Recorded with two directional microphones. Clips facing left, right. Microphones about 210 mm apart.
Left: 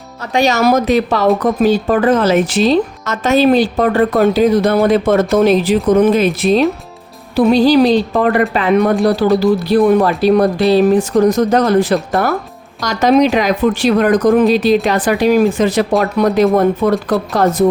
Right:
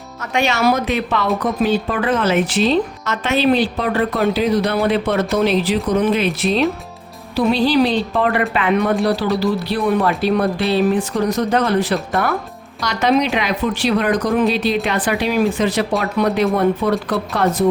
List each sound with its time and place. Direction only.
0.2 s a woman's voice: 35° left (ahead or behind)